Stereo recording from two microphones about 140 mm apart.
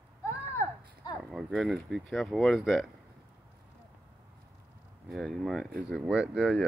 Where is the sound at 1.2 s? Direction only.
5° right (ahead or behind).